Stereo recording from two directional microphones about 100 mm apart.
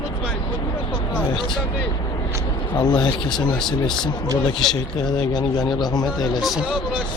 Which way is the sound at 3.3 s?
5° left (ahead or behind).